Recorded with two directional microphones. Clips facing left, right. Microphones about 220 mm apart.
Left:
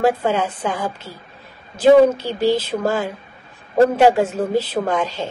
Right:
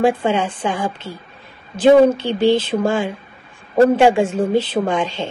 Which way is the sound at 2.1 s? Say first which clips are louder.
Right 3 dB; 25° right (ahead or behind).